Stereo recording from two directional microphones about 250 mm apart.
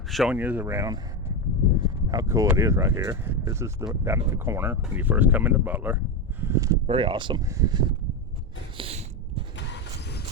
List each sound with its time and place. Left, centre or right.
0.1 s speech: centre
2.0 s speech: centre
8.8 s a sound: right